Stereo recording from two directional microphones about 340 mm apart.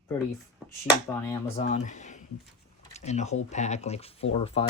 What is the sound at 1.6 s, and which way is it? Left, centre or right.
Speech, left.